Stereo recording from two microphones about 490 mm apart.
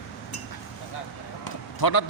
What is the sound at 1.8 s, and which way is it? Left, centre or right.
Speech, left.